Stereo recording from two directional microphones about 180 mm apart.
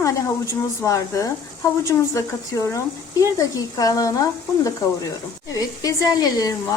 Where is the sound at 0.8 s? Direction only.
15° left (ahead or behind).